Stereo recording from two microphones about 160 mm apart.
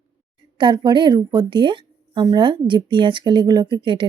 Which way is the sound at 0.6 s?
25° right (ahead or behind).